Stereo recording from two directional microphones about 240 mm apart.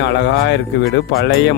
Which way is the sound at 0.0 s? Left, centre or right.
Left.